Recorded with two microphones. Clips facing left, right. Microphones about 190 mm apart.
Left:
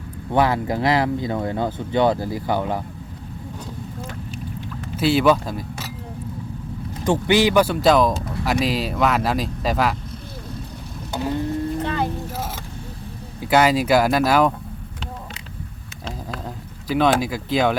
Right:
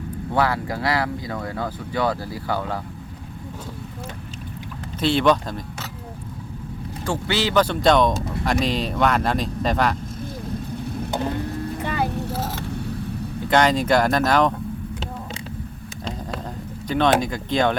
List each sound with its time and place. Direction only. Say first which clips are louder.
0.3 s speech: left 3 dB; 20° left (ahead or behind)
4.9 s speech: left 2 dB; 5° left (ahead or behind)
7.0 s speech: left 6 dB; 15° left (ahead or behind)
11.8 s vehicle: left 1 dB; 10° right (ahead or behind)
13.5 s speech: left 2 dB; 5° left (ahead or behind)
16.9 s speech: left 1 dB; 5° left (ahead or behind)